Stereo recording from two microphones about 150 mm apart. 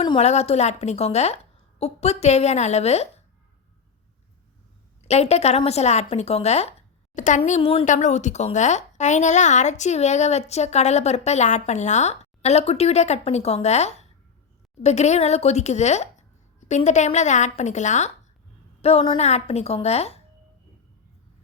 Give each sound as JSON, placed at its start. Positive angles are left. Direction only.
{"t": 0.2, "sound": "a woman's voice", "side_deg": 45}
{"t": 5.0, "sound": "a woman's voice", "side_deg": 45}
{"t": 7.9, "sound": "a woman's voice", "side_deg": 50}